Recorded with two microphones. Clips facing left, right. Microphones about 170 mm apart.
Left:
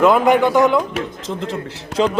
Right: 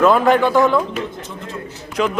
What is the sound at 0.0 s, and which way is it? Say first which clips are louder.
Speech: even; 15° left (ahead or behind).